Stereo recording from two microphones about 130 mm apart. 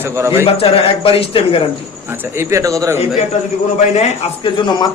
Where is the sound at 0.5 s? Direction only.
45° left (ahead or behind).